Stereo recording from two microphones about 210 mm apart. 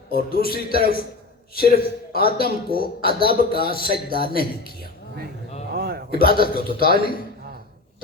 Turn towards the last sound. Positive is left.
turn(degrees=45)  # may be behind; listen again after turning